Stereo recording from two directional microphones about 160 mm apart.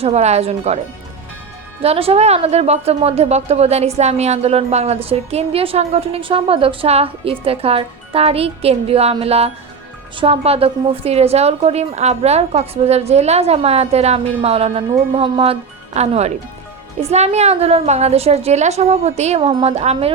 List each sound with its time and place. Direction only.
0.0 s a woman's voice: 45° right (ahead or behind)
1.8 s a woman's voice: 40° right (ahead or behind)